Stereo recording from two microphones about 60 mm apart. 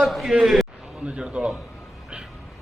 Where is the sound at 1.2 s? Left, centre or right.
Centre.